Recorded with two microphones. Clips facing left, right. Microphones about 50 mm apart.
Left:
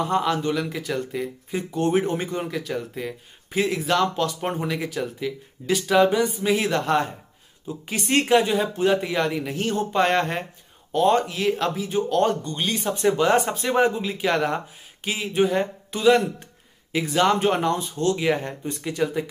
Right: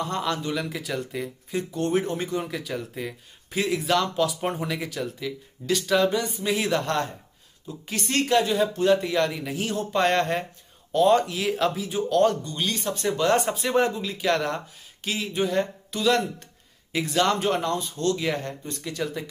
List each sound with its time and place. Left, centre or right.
0.0 s speech: centre
8.1 s speech: left
9.5 s speech: centre
12.9 s speech: left
13.5 s speech: centre
16.9 s speech: centre